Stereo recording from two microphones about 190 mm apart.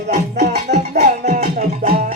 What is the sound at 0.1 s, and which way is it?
Music, 35° right (ahead or behind).